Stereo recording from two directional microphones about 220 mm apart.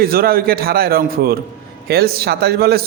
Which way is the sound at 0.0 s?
40° right (ahead or behind).